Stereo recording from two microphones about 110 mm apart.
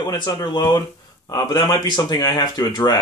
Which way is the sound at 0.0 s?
35° left (ahead or behind).